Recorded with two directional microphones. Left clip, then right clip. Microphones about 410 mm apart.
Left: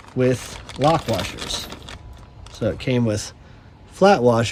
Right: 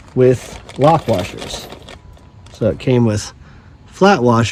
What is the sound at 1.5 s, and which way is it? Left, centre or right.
Speech, centre.